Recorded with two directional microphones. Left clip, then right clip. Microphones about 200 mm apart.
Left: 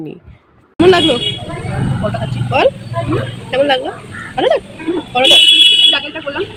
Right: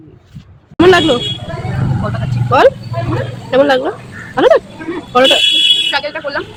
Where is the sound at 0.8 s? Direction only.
35° right (ahead or behind).